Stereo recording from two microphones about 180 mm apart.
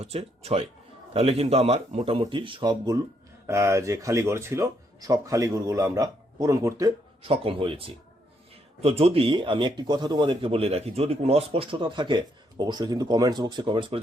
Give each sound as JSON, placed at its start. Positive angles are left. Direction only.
{"t": 0.0, "sound": "speech", "side_deg": -35}
{"t": 7.2, "sound": "speech", "side_deg": -30}